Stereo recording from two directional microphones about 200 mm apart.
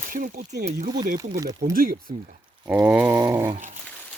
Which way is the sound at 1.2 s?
15° right (ahead or behind).